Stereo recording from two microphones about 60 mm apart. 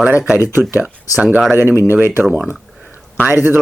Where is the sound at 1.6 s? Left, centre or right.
Right.